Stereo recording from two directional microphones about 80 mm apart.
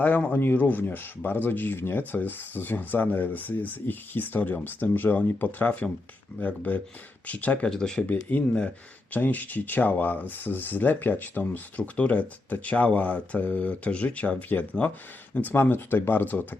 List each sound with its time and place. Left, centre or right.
0.0 s speech: left; by 8.0 s centre
8.1 s speech: left